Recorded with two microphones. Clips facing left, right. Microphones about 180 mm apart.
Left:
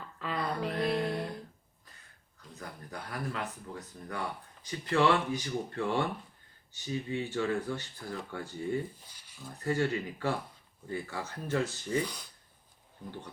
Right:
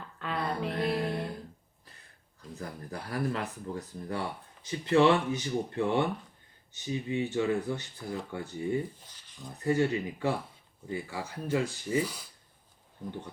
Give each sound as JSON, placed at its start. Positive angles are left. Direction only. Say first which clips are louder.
{"t": 0.2, "sound": "music", "louder": "right 1 dB", "side_deg": 0}
{"t": 2.6, "sound": "speech", "louder": "right 3 dB", "side_deg": -35}
{"t": 9.0, "sound": "speech", "louder": "right 2 dB", "side_deg": 10}
{"t": 9.5, "sound": "speech", "louder": "right 3 dB", "side_deg": -20}